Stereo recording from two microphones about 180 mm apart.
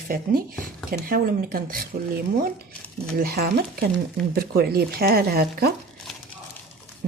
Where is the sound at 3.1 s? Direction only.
60° right (ahead or behind).